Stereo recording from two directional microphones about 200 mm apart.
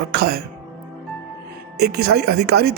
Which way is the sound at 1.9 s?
55° right (ahead or behind).